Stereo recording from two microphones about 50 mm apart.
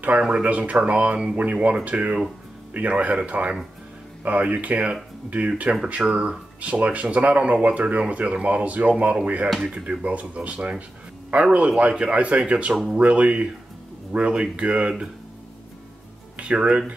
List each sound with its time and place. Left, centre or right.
0.2 s speech: right
16.3 s speech: right